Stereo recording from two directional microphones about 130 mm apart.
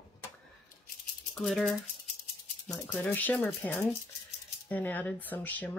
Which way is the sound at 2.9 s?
15° left (ahead or behind).